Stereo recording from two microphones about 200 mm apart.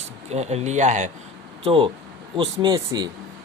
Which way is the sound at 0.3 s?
35° right (ahead or behind).